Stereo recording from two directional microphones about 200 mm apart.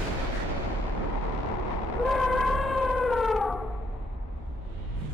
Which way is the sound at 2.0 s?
Centre (ahead or behind).